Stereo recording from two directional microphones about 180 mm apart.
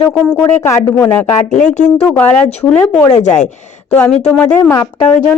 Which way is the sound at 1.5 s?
40° left (ahead or behind).